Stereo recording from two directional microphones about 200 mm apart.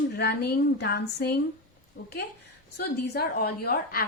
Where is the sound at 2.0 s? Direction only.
70° left (ahead or behind).